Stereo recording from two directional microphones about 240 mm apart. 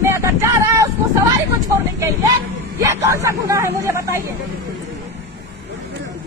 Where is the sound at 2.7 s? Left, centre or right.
Centre.